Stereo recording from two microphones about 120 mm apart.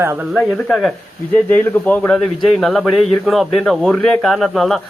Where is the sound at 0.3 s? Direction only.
Centre (ahead or behind).